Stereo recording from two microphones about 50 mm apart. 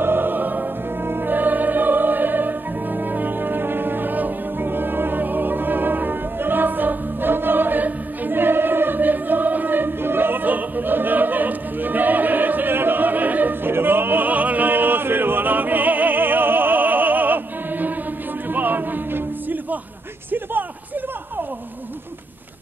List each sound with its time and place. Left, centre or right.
0.0 s music: right
13.7 s opera: right
18.5 s music: right